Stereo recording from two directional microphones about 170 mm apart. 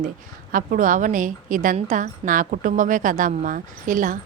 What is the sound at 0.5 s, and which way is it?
A woman's voice, 50° right (ahead or behind).